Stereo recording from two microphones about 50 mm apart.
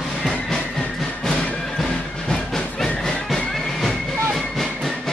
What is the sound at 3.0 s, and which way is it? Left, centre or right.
Music, centre.